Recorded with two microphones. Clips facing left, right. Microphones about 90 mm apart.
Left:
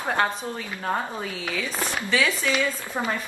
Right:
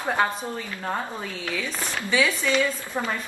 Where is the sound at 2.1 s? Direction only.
5° right (ahead or behind).